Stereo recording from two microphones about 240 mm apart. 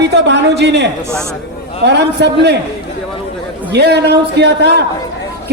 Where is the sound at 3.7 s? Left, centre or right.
Right.